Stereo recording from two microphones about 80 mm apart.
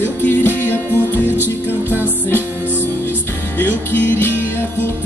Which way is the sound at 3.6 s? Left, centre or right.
Left.